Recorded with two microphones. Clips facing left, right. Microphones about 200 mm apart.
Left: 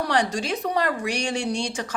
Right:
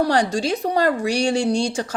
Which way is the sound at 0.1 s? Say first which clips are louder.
Right 4 dB; 30° right (ahead or behind).